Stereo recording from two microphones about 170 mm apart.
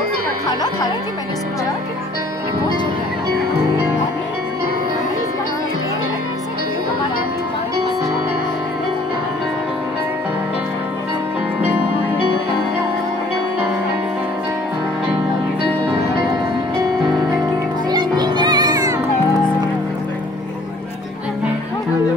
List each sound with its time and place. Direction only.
17.9 s music: 25° right (ahead or behind)